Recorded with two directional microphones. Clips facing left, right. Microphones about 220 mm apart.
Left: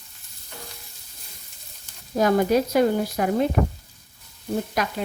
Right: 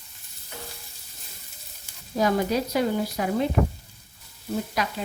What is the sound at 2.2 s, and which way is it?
Sizzle, 50° left (ahead or behind).